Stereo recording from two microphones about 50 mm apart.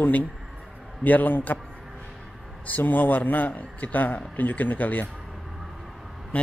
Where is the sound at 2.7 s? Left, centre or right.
Left.